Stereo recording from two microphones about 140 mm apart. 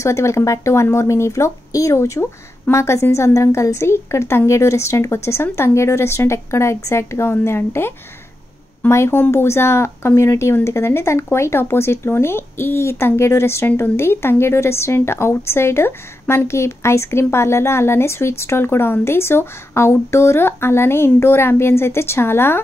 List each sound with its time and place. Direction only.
0.0 s speech: 20° left (ahead or behind)